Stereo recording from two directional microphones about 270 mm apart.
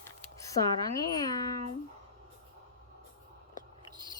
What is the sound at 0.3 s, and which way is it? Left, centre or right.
Speech, centre.